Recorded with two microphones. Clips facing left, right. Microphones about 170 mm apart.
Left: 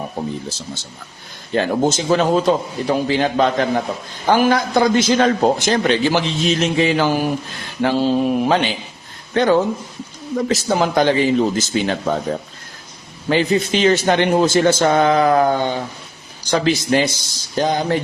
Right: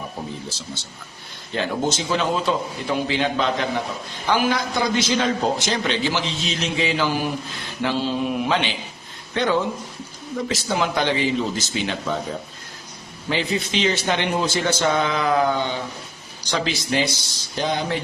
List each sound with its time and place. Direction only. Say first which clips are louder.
1.5 s a man's voice: left 6 dB; 45° left (ahead or behind)
13.2 s a man's voice: left 7 dB; 50° left (ahead or behind)